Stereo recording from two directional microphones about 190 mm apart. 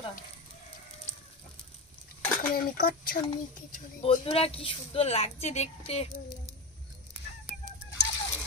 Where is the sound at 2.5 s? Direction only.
50° left (ahead or behind).